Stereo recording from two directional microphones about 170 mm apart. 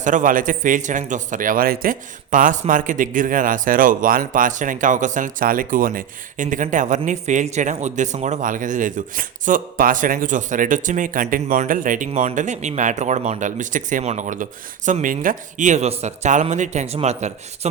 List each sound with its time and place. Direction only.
0.0 s speech: 50° right (ahead or behind)